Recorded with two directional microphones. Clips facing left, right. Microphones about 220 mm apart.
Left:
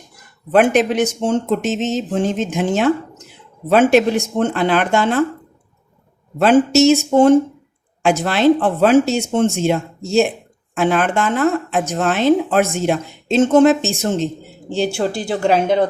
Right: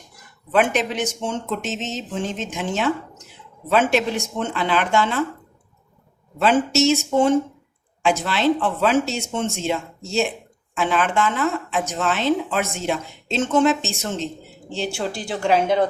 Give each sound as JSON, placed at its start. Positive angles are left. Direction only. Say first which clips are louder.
{"t": 0.5, "sound": "speech", "louder": "left 7 dB", "side_deg": 50}
{"t": 6.4, "sound": "speech", "louder": "left 6 dB", "side_deg": 50}